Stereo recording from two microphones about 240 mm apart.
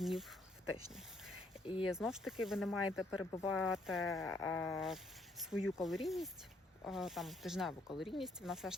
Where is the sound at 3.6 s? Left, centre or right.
Centre.